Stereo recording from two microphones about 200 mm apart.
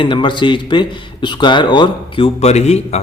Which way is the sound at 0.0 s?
25° left (ahead or behind).